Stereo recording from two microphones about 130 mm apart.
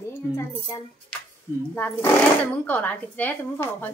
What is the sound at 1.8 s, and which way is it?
Speech, 10° left (ahead or behind).